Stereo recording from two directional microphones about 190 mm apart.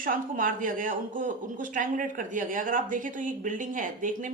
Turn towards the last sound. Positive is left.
turn(degrees=-45)  # may be behind; listen again after turning